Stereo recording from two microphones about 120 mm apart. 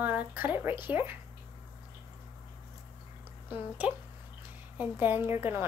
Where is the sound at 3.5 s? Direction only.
15° right (ahead or behind).